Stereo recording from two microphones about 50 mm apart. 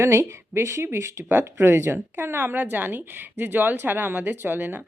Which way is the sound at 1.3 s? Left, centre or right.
Right.